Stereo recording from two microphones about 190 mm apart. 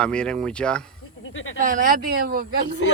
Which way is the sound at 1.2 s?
90° left.